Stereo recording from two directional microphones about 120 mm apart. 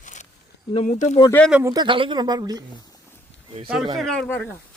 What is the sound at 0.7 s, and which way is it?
Speech, 75° left (ahead or behind).